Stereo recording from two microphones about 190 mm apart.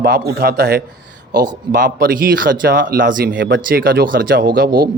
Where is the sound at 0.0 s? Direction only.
55° right (ahead or behind).